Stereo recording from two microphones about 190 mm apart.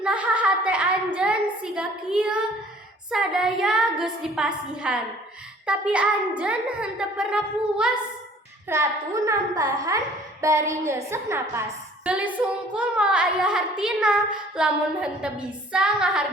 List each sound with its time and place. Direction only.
0.0 s a sound: 5° right (ahead or behind)
3.1 s speech: 5° right (ahead or behind)
8.7 s a woman's voice: 15° right (ahead or behind)